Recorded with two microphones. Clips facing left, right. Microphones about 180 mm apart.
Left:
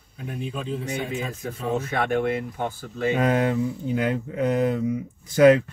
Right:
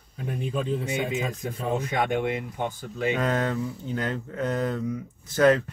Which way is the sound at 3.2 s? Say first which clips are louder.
Left 4 dB; 10° left (ahead or behind).